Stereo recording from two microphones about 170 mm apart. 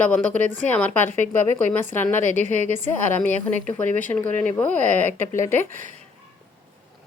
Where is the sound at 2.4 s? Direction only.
40° right (ahead or behind).